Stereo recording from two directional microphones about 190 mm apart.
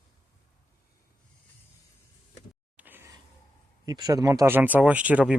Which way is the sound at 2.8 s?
10° right (ahead or behind).